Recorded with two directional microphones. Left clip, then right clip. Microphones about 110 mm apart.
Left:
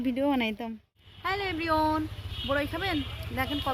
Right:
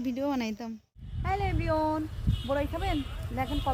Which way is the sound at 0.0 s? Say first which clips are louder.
Left 4 dB; 25° left (ahead or behind).